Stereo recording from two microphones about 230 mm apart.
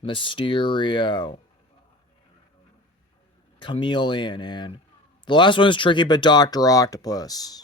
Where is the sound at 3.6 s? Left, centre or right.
Left.